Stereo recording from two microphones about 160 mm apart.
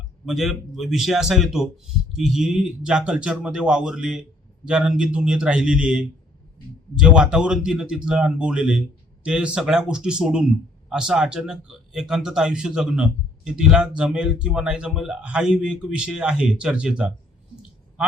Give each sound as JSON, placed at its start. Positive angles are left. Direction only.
{"t": 0.3, "sound": "speech", "side_deg": 0}